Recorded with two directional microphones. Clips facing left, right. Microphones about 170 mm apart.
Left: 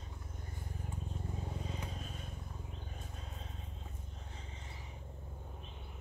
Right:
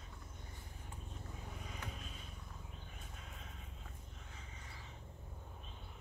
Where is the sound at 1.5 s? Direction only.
30° left (ahead or behind).